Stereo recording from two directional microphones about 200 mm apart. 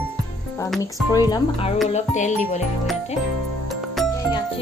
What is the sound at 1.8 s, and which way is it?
Music, 35° left (ahead or behind).